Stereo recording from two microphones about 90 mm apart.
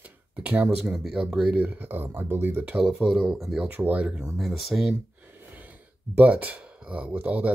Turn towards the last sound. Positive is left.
turn(degrees=-15)  # may be behind; listen again after turning